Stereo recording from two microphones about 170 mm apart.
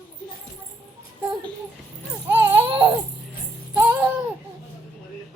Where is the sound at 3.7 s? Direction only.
10° right (ahead or behind).